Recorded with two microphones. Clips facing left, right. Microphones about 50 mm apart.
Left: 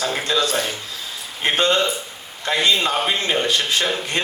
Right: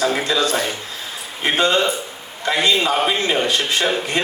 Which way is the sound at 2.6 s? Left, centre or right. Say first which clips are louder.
Right 2 dB; right.